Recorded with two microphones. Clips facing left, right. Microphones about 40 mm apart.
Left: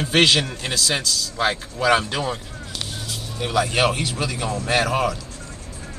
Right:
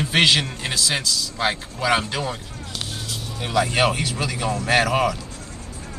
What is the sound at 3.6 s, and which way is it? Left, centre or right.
Speech, centre.